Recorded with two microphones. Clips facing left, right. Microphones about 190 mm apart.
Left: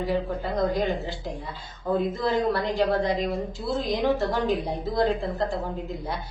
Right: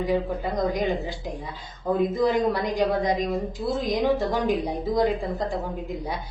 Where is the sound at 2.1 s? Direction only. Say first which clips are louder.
Right 2 dB; 15° right (ahead or behind).